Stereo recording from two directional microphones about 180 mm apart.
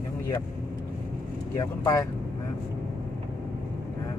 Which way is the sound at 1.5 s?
20° left (ahead or behind).